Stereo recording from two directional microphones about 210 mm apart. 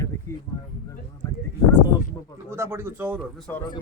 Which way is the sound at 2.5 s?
10° right (ahead or behind).